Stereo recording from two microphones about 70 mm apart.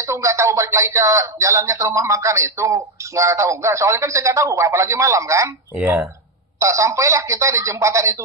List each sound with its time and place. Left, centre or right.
0.0 s speech: right
5.8 s speech: right
6.6 s speech: right